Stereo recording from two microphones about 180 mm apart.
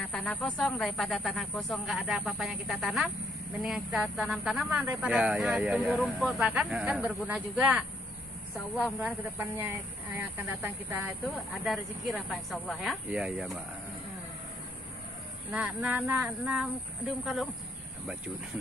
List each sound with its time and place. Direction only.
0.0 s speech: 5° left (ahead or behind)
9.0 s speech: 10° right (ahead or behind)
11.2 s speech: centre (ahead or behind)
15.5 s speech: 10° right (ahead or behind)